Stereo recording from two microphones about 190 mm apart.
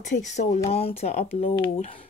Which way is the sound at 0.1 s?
40° left (ahead or behind).